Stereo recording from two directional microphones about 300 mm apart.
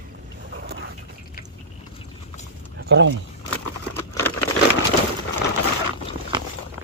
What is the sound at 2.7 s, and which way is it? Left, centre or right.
Speech, right.